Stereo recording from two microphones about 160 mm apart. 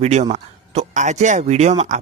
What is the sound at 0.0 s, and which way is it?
A man's voice, 45° right (ahead or behind).